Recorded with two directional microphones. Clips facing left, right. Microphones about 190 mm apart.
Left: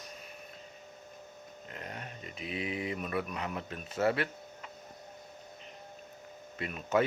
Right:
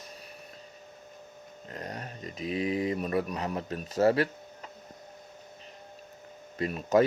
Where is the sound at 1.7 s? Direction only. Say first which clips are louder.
Right 5 dB; 40° right (ahead or behind).